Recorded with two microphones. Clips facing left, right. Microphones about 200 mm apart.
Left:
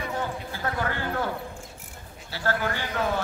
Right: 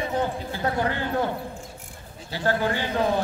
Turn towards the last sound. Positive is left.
turn(degrees=-20)  # may be behind; listen again after turning